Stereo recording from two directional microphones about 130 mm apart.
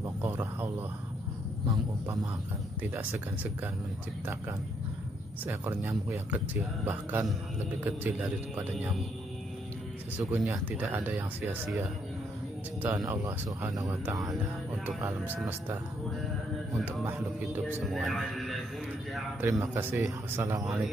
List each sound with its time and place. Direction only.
0.0 s a sound: 15° right (ahead or behind)
2.8 s speech: 15° right (ahead or behind)
5.4 s speech: 15° right (ahead or behind)
10.1 s speech: 15° right (ahead or behind)
15.0 s speech: 15° right (ahead or behind)
17.8 s a man's voice: centre (ahead or behind)
19.4 s speech: 20° right (ahead or behind)